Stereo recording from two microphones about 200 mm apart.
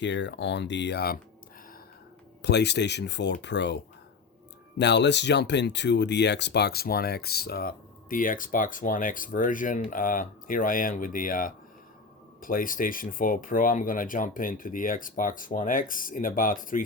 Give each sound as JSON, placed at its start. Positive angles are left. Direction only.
{"t": 0.0, "sound": "speech", "side_deg": 65}
{"t": 2.4, "sound": "speech", "side_deg": 55}
{"t": 4.8, "sound": "speech", "side_deg": 60}